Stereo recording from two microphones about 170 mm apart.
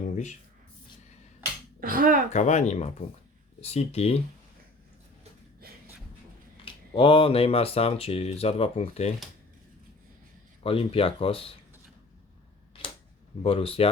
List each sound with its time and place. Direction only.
1.8 s speech: 55° right (ahead or behind)
2.3 s speech: 45° left (ahead or behind)
5.6 s a sound: 65° right (ahead or behind)
6.9 s speech: 30° left (ahead or behind)
10.6 s speech: 35° left (ahead or behind)
13.4 s speech: 35° left (ahead or behind)